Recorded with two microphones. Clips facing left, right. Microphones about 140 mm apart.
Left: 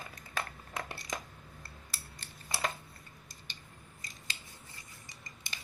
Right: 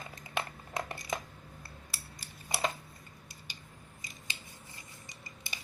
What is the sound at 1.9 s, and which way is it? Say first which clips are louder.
Cutlery: right 1 dB; 10° right (ahead or behind).